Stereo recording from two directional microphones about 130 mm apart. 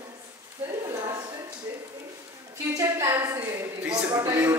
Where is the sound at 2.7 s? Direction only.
25° right (ahead or behind).